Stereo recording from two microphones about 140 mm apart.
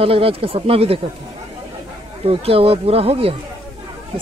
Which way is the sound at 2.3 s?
45° right (ahead or behind).